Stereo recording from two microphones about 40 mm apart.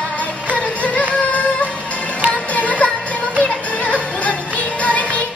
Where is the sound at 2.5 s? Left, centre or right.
Left.